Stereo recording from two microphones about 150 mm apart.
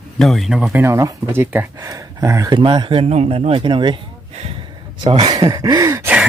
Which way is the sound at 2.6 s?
35° right (ahead or behind).